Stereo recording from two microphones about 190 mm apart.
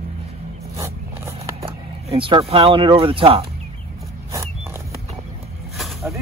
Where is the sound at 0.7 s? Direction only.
15° right (ahead or behind).